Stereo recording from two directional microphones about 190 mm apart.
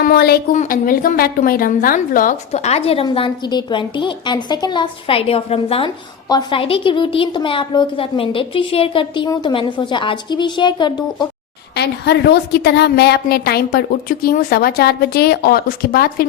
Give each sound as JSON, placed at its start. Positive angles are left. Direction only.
{"t": 0.0, "sound": "a woman's voice", "side_deg": 50}
{"t": 11.7, "sound": "a woman's voice", "side_deg": 60}